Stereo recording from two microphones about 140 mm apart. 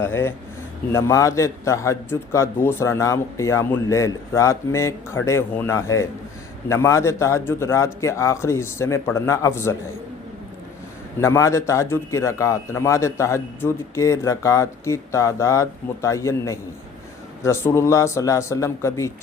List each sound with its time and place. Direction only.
0.0 s a man's voice: 15° left (ahead or behind)
11.2 s a man's voice: 20° left (ahead or behind)